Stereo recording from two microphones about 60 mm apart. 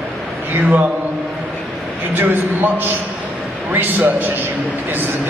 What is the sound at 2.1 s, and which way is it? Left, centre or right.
Speech, right.